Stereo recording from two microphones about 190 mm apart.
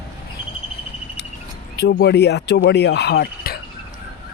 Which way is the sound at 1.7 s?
60° left (ahead or behind).